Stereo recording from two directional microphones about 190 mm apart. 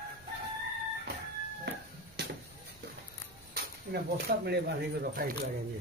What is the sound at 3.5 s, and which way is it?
Speech, 55° right (ahead or behind).